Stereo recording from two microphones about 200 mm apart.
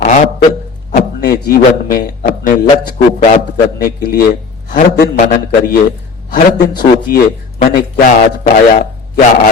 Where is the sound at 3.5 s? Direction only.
45° left (ahead or behind).